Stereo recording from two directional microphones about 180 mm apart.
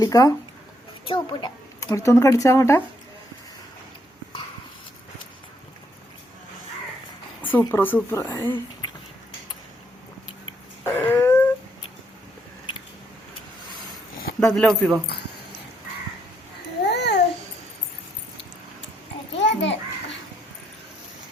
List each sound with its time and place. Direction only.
0.0 s speech: 20° left (ahead or behind)
7.4 s speech: 10° left (ahead or behind)
10.8 s a sound: 10° left (ahead or behind)
14.4 s speech: 5° left (ahead or behind)
16.8 s babbling: 70° left (ahead or behind)
19.4 s children playing: 80° left